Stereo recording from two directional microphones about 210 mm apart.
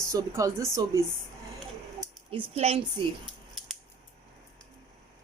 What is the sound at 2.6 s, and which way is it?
Speech, 30° right (ahead or behind).